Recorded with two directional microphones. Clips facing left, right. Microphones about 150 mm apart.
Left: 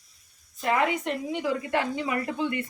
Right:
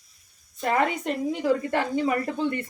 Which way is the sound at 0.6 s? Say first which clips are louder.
Right 1 dB; 40° right (ahead or behind).